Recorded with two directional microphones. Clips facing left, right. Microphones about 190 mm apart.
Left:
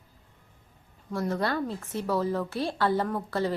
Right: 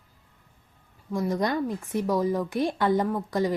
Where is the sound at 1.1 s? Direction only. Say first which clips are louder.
Right 2 dB; 15° right (ahead or behind).